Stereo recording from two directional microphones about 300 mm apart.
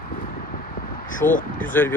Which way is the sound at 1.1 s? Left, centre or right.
Left.